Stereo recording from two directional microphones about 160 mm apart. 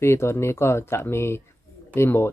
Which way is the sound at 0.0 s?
15° left (ahead or behind).